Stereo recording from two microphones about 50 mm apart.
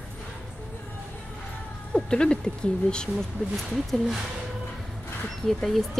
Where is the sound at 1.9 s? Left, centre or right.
Centre.